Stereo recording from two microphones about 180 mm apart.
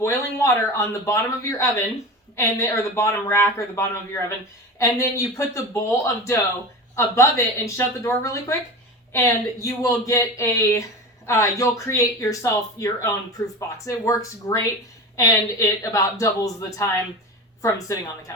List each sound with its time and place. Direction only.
0.0 s speech: 15° left (ahead or behind)
6.9 s speech: 15° left (ahead or behind)